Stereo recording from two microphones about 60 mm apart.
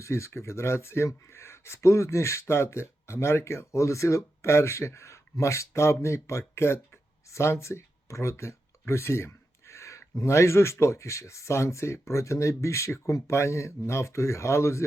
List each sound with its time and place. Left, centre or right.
0.0 s speech: left
8.9 s a sound: left
10.2 s speech: left